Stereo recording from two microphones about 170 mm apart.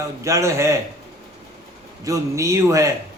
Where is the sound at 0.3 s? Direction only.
15° right (ahead or behind).